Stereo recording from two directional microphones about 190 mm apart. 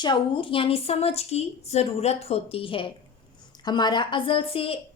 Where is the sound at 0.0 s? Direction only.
25° left (ahead or behind).